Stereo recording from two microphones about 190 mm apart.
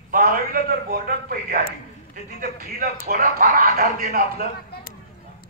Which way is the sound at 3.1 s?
45° right (ahead or behind).